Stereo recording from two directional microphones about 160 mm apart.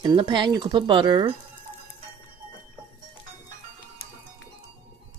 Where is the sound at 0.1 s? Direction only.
30° right (ahead or behind).